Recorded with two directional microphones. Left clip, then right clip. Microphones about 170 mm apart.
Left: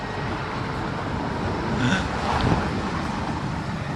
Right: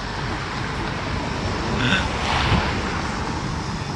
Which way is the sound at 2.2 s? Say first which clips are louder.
Right 2 dB; 45° left (ahead or behind).